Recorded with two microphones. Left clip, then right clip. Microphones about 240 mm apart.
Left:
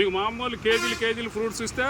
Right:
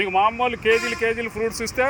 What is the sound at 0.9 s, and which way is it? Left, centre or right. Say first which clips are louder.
Speech: right 3 dB; left.